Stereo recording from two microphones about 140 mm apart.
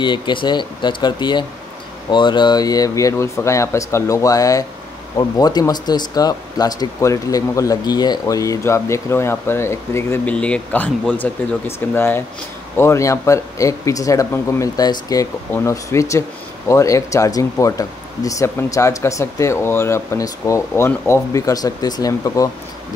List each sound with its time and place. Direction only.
0.0 s speech: 35° left (ahead or behind); by 10.3 s 20° left (ahead or behind)
10.3 s speech: 10° left (ahead or behind); by 22.5 s 25° left (ahead or behind)